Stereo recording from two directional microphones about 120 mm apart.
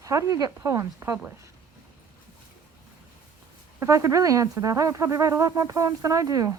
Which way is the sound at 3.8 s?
25° right (ahead or behind).